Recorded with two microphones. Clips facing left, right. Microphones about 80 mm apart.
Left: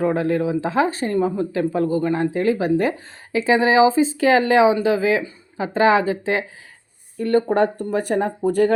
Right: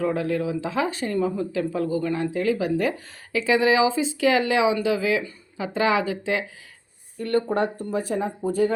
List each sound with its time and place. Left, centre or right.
0.0 s speech: left
7.4 s speech: left